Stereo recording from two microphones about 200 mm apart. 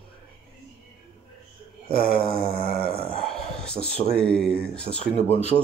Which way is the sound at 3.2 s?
5° left (ahead or behind).